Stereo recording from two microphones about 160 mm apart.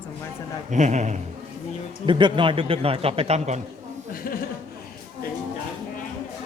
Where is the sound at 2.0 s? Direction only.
30° right (ahead or behind).